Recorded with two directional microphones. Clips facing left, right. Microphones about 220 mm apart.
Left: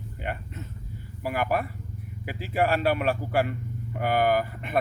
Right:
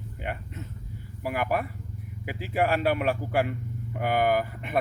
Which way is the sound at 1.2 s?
15° right (ahead or behind).